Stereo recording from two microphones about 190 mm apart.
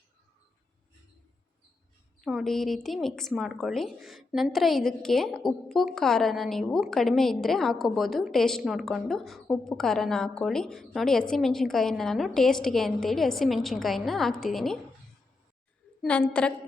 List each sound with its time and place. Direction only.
2.2 s a woman's voice: centre (ahead or behind)
16.0 s a woman's voice: 5° left (ahead or behind)